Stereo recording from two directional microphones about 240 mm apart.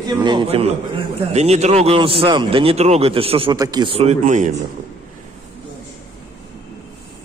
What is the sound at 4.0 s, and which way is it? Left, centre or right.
Speech, right.